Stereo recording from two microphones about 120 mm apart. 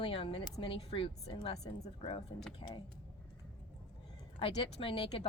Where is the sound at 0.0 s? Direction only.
50° left (ahead or behind).